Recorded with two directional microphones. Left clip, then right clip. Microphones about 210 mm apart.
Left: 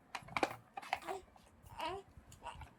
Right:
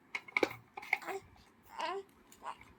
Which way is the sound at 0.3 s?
5° right (ahead or behind).